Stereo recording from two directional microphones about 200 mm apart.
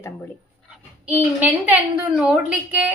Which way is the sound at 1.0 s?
10° right (ahead or behind).